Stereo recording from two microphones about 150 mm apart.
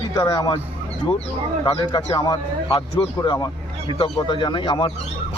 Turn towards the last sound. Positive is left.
turn(degrees=35)  # may be behind; listen again after turning